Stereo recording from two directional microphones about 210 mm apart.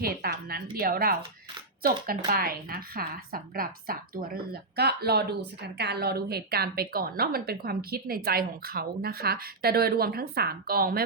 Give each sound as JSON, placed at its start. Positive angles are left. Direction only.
{"t": 0.0, "sound": "speech", "side_deg": -45}